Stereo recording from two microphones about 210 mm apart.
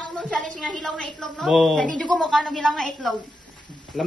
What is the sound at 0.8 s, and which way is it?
A woman's voice, 5° left (ahead or behind).